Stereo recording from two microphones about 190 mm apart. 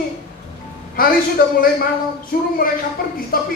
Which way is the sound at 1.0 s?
50° left (ahead or behind).